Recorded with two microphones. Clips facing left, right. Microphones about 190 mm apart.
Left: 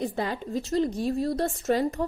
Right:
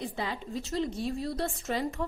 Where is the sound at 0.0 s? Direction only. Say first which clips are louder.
Left 6 dB; 45° left (ahead or behind).